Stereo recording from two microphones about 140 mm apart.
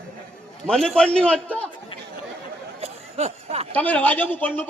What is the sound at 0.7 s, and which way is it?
A man's voice, 5° left (ahead or behind).